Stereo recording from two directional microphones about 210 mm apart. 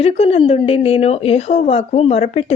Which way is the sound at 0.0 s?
30° left (ahead or behind).